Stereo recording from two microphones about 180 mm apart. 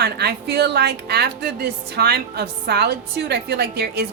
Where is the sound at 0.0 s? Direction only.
60° right (ahead or behind).